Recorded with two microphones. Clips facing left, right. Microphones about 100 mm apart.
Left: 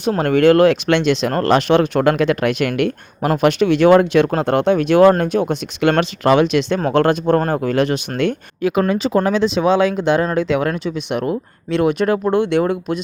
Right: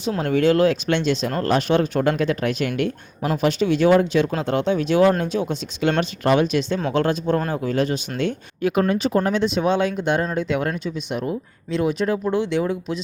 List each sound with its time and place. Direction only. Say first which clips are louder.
0.0 s a man's voice: left 6 dB; 65° left (ahead or behind)
6.7 s speech: left 7 dB; 55° left (ahead or behind)
8.8 s a man's voice: left 3 dB; 90° left; by 13.0 s 60° left (ahead or behind)